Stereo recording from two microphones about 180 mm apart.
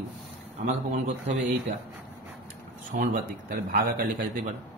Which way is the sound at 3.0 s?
45° right (ahead or behind).